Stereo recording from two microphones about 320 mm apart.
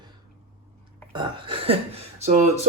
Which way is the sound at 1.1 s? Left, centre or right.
Centre.